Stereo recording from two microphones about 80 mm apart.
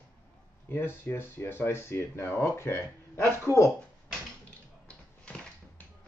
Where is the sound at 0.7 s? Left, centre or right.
Left.